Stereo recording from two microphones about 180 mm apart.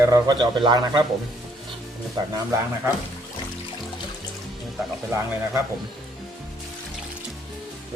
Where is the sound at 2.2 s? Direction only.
25° right (ahead or behind).